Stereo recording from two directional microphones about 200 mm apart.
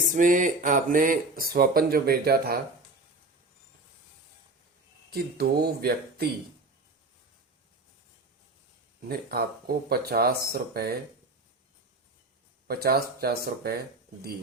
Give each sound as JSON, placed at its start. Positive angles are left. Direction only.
{"t": 0.0, "sound": "speech", "side_deg": -40}
{"t": 5.1, "sound": "speech", "side_deg": -50}
{"t": 9.0, "sound": "speech", "side_deg": -50}
{"t": 12.6, "sound": "speech", "side_deg": -50}